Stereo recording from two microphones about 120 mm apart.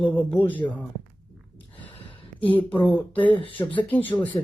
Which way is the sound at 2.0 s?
50° left (ahead or behind).